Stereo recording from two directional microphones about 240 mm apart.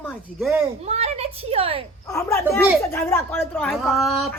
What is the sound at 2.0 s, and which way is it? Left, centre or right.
A man's voice, centre.